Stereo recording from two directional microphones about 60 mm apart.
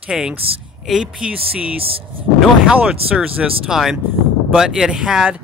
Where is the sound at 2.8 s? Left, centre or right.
Right.